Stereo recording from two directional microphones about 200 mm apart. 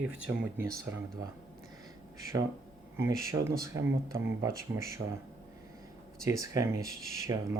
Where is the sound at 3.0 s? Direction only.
15° right (ahead or behind).